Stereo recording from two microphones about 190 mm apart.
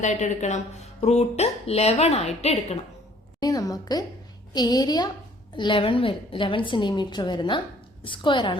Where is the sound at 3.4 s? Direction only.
20° left (ahead or behind).